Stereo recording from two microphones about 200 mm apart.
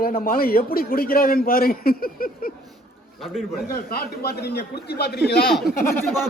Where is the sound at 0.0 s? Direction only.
45° left (ahead or behind).